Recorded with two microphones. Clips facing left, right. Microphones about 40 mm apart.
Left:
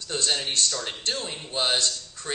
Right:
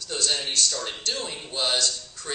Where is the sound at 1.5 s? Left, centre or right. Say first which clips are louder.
Left 1 dB; left.